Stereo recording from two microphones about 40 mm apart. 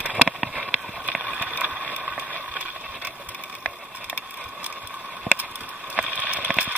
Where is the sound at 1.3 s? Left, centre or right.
Right.